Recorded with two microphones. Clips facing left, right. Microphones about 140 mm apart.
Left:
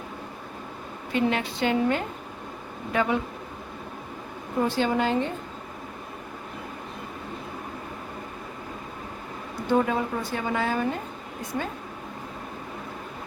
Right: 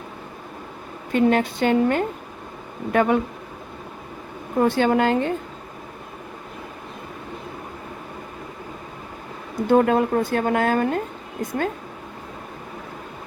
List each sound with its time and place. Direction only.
1.1 s a woman's voice: 50° right (ahead or behind)
4.6 s speech: 55° right (ahead or behind)
9.6 s speech: 55° right (ahead or behind)